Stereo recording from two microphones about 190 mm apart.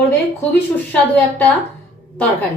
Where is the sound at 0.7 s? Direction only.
10° left (ahead or behind).